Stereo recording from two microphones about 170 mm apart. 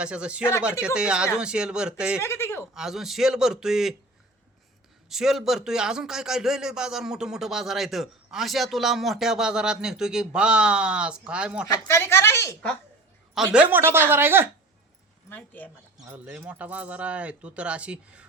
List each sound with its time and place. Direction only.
0.0 s a man's voice: 5° right (ahead or behind)
2.2 s speech: 15° left (ahead or behind)
2.7 s a man's voice: centre (ahead or behind)
5.0 s a man's voice: centre (ahead or behind)
11.8 s speech: 15° left (ahead or behind)
13.3 s speech: 5° right (ahead or behind)
15.3 s speech: 10° left (ahead or behind)
16.1 s speech: 10° right (ahead or behind)